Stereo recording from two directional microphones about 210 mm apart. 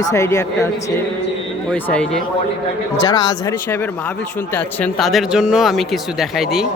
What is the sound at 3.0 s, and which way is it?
Speech, 20° left (ahead or behind).